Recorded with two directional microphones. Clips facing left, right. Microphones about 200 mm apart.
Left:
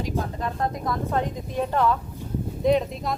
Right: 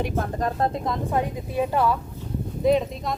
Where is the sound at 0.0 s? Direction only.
50° right (ahead or behind).